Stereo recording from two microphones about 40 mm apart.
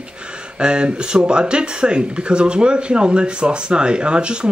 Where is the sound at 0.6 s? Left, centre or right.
Right.